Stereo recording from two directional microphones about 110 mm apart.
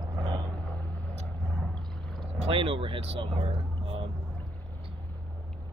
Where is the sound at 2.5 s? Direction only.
55° right (ahead or behind).